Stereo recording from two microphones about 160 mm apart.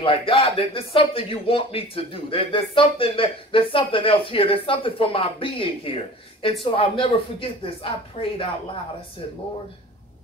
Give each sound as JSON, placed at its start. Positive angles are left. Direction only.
{"t": 0.0, "sound": "speech", "side_deg": 35}